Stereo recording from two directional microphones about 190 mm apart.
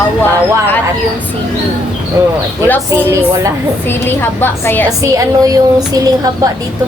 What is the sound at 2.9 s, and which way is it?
Speech, 15° right (ahead or behind).